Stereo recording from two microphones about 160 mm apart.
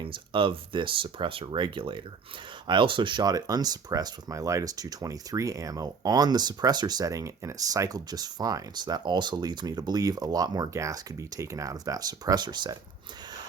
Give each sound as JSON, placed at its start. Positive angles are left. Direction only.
{"t": 0.0, "sound": "speech", "side_deg": -30}